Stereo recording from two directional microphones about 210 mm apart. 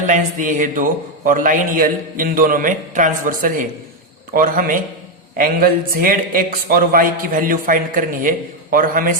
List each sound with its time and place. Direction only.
0.0 s a man's voice: 40° right (ahead or behind)